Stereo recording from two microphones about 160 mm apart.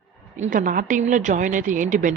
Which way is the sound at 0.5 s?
55° right (ahead or behind).